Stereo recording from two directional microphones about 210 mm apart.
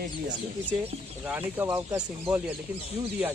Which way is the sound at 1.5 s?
10° right (ahead or behind).